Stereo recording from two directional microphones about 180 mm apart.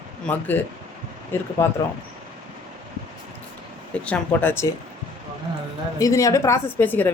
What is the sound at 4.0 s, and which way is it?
Speech, 10° left (ahead or behind).